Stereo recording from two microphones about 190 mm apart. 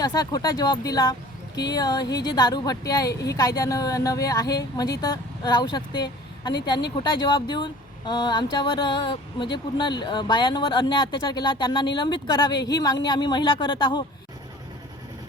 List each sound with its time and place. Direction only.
0.0 s speech: 20° left (ahead or behind)